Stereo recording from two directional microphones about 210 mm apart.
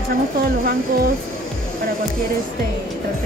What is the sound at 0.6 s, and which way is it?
Speech, 45° right (ahead or behind).